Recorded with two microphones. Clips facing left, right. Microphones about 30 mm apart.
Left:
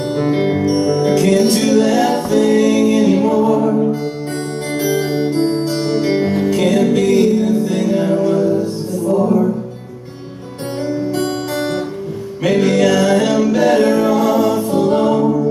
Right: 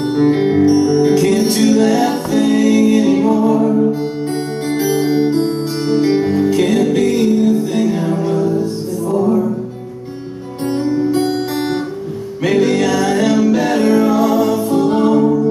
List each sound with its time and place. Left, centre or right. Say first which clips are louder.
0.1 s music: right 3 dB; centre
4.7 s music: right 2 dB; centre
6.5 s music: even; centre
12.4 s music: left 1 dB; centre